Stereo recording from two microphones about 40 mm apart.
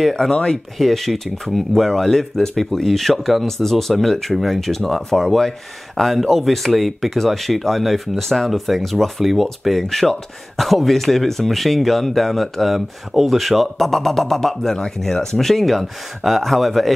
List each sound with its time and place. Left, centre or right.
0.0 s speech: centre